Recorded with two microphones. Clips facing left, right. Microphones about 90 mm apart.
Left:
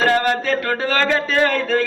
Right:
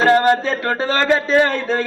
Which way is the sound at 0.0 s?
25° right (ahead or behind).